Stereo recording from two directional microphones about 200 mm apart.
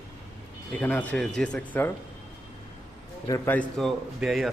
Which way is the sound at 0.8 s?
5° left (ahead or behind).